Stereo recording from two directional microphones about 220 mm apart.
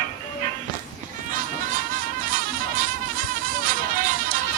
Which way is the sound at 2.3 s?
40° right (ahead or behind).